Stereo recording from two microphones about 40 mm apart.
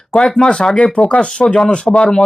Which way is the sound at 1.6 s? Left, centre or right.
Centre.